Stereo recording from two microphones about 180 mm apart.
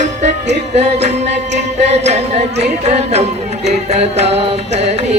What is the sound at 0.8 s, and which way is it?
Carnatic music, 35° right (ahead or behind).